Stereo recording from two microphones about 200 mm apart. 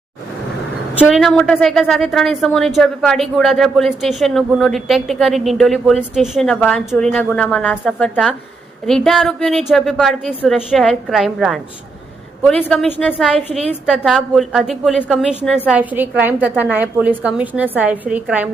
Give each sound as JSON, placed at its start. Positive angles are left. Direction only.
{"t": 1.0, "sound": "a woman's voice", "side_deg": 0}
{"t": 13.3, "sound": "a woman's voice", "side_deg": -30}
{"t": 13.8, "sound": "a woman's voice", "side_deg": 0}